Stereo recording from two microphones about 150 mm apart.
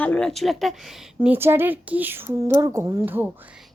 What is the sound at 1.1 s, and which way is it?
A woman's voice, 15° right (ahead or behind).